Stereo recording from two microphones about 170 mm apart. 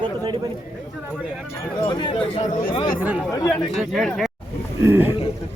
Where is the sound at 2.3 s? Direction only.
45° left (ahead or behind).